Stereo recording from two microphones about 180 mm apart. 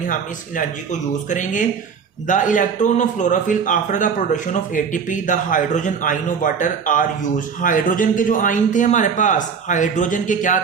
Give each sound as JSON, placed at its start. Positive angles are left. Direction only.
{"t": 0.1, "sound": "a man's voice", "side_deg": 45}